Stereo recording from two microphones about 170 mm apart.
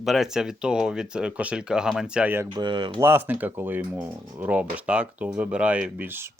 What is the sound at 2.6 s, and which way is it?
Speech, 30° right (ahead or behind).